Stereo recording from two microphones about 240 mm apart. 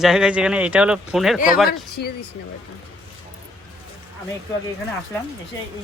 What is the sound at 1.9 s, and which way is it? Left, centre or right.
Speech, left.